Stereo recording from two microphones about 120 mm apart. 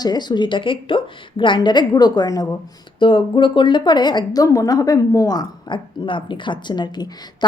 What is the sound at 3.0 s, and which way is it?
A woman's voice, 45° left (ahead or behind).